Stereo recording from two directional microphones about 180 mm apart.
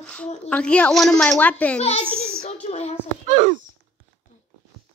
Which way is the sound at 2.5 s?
35° left (ahead or behind).